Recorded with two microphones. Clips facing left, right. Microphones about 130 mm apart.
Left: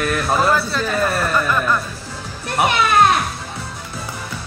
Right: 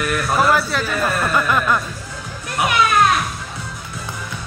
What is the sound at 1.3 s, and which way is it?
Speech, 15° right (ahead or behind).